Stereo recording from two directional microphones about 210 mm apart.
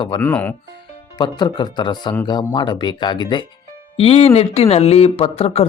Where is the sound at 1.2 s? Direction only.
20° left (ahead or behind).